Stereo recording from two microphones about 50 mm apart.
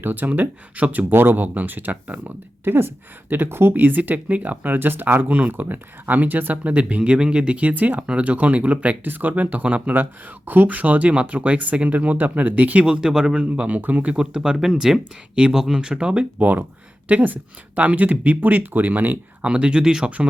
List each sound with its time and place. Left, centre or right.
0.0 s speech: right
1.1 s speech: right
2.2 s speech: right
12.8 s speech: centre; by 14.1 s right
14.1 s speech: centre
16.4 s speech: right
19.4 s speech: right